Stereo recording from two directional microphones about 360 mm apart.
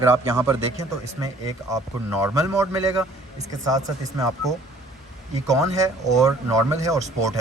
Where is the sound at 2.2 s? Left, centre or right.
Centre.